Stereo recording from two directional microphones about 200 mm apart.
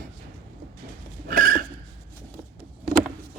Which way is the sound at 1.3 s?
45° right (ahead or behind).